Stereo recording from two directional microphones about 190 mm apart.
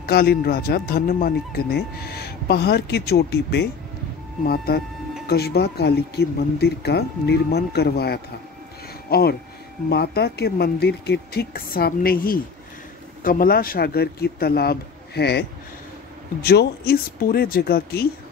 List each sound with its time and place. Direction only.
0.0 s speech: 55° left (ahead or behind)
16.4 s speech: 55° left (ahead or behind)